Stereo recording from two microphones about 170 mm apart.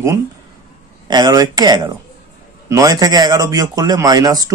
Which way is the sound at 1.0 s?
25° right (ahead or behind).